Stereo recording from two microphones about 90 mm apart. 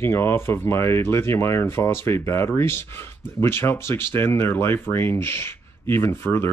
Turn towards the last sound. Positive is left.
turn(degrees=25)  # may be behind; listen again after turning